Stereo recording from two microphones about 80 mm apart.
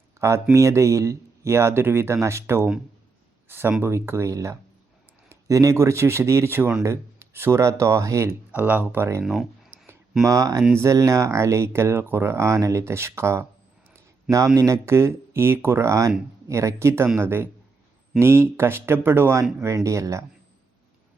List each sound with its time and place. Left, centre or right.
0.2 s speech: right
8.5 s speech: centre
9.2 s speech: centre
10.2 s speech: right